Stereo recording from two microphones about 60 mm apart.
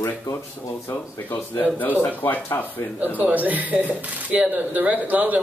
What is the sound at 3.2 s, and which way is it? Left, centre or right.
Speech, right.